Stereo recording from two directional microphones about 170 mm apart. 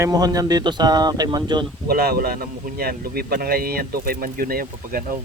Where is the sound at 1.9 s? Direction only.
65° right (ahead or behind).